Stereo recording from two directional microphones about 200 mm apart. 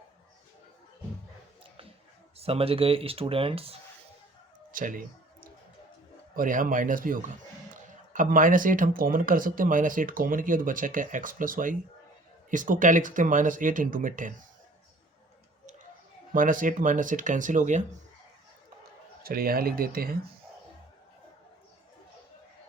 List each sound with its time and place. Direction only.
2.4 s speech: 30° right (ahead or behind)
4.7 s clicking: 40° right (ahead or behind)
6.3 s speech: 40° right (ahead or behind)
16.3 s speech: 40° right (ahead or behind)
19.2 s speech: 50° right (ahead or behind)